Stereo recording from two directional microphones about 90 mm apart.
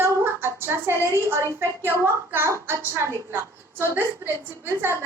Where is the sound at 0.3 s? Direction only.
30° right (ahead or behind).